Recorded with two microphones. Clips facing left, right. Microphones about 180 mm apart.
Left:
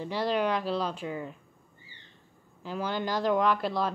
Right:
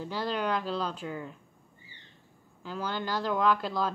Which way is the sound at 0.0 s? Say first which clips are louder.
Left 3 dB; 15° left (ahead or behind).